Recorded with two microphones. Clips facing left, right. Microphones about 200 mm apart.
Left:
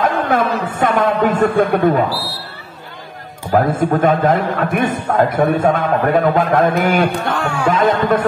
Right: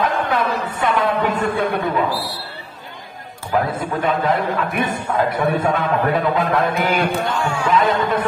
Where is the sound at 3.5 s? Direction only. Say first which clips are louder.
Left 6 dB; 45° left (ahead or behind).